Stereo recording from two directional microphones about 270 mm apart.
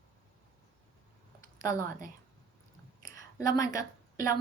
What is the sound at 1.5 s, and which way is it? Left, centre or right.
Speech, centre.